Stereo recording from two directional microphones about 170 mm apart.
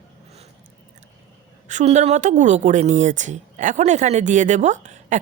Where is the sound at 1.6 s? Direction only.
45° right (ahead or behind).